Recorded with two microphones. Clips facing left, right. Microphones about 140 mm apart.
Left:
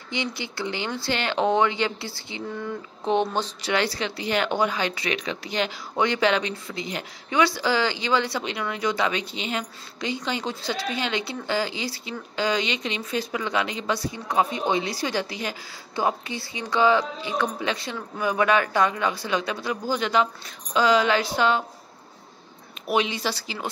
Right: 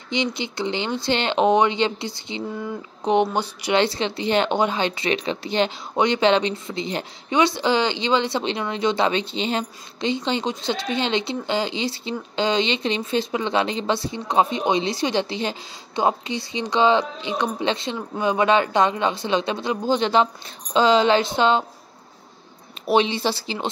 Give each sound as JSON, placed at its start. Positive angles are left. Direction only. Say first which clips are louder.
{"t": 0.1, "sound": "speech", "louder": "right 5 dB", "side_deg": -20}
{"t": 2.5, "sound": "a sound", "louder": "right 2 dB", "side_deg": -15}
{"t": 3.7, "sound": "speech", "louder": "right 5 dB", "side_deg": -25}
{"t": 22.8, "sound": "speech", "louder": "right 5 dB", "side_deg": -30}